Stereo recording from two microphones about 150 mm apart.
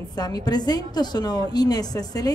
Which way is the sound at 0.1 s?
25° left (ahead or behind).